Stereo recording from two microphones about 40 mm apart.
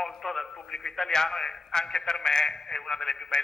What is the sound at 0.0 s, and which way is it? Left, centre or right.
A man's voice, centre.